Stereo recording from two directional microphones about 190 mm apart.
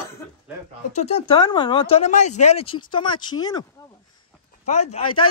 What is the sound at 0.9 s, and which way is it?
Speech, 35° left (ahead or behind).